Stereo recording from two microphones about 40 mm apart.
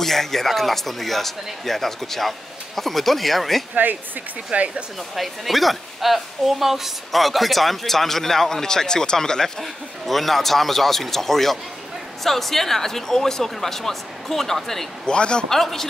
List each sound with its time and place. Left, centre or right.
0.0 s a woman's voice: centre
4.5 s speech: right
5.1 s a woman's voice: centre
10.0 s a woman's voice: centre
15.0 s a man's voice: left
15.5 s speech: centre